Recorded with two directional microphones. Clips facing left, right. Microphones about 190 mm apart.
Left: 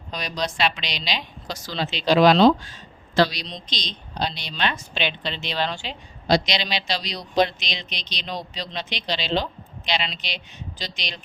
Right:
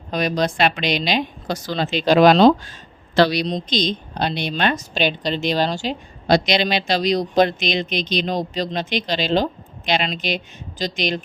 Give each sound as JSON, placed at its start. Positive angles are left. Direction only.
{"t": 0.1, "sound": "a woman's voice", "side_deg": -50}
{"t": 3.2, "sound": "a woman's voice", "side_deg": -65}
{"t": 3.4, "sound": "a woman's voice", "side_deg": -50}